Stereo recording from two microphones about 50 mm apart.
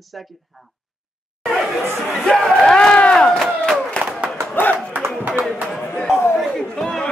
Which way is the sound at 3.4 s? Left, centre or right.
Centre.